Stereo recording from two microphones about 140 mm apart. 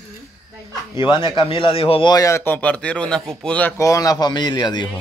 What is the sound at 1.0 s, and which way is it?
A man's voice, 35° left (ahead or behind).